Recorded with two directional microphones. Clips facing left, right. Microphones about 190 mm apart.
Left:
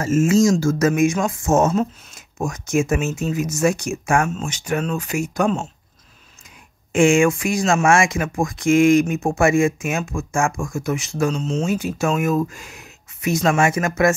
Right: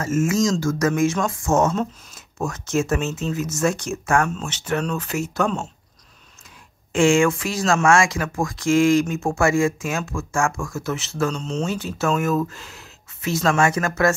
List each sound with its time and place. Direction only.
0.0 s speech: 25° left (ahead or behind)
6.9 s speech: 15° left (ahead or behind)